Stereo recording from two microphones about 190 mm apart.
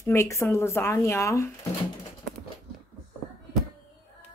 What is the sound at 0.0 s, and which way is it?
Speech, 15° left (ahead or behind).